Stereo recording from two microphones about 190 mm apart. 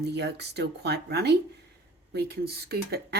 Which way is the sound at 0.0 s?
60° right (ahead or behind).